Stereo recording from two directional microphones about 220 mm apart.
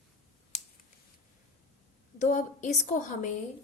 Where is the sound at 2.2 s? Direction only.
35° left (ahead or behind).